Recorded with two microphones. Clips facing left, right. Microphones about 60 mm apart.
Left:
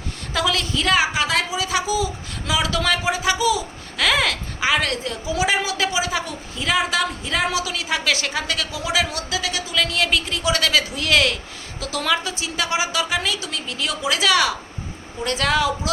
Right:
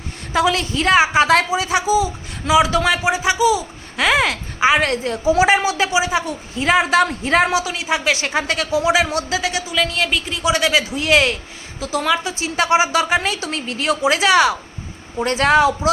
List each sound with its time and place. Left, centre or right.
0.3 s speech: right
6.2 s a woman's voice: right
7.5 s speech: right
9.6 s a woman's voice: centre
12.0 s a woman's voice: centre
12.3 s a woman's voice: right